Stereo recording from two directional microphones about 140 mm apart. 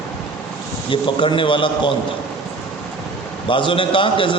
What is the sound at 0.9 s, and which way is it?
A man's voice, 35° left (ahead or behind).